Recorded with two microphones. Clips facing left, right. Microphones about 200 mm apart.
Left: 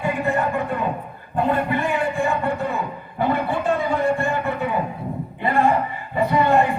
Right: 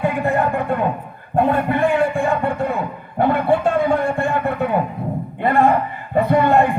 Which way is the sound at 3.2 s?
55° right (ahead or behind).